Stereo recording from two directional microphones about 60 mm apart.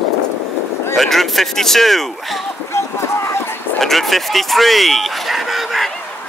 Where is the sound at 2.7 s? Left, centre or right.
Left.